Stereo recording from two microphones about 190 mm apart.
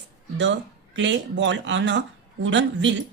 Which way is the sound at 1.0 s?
75° right (ahead or behind).